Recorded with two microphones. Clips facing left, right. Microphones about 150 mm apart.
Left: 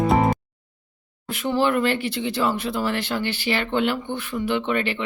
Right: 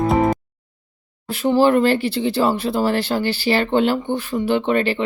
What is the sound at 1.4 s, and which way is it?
Speech, 35° right (ahead or behind).